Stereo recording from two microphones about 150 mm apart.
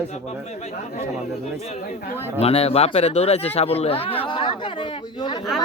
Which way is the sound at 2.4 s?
40° left (ahead or behind).